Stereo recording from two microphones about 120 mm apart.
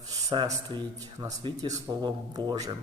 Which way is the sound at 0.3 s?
35° right (ahead or behind).